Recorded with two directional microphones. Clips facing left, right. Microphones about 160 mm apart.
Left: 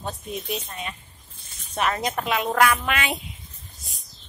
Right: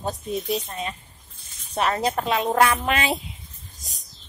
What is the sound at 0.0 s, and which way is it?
A woman's voice, 40° right (ahead or behind).